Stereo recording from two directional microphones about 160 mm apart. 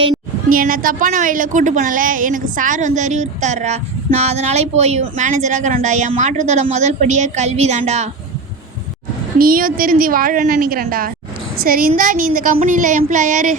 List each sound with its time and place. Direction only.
0.5 s a woman's voice: 60° right (ahead or behind); by 8.1 s 45° right (ahead or behind)
9.4 s speech: 65° right (ahead or behind)